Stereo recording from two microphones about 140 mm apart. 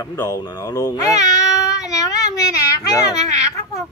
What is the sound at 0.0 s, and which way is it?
A woman's voice, 25° left (ahead or behind).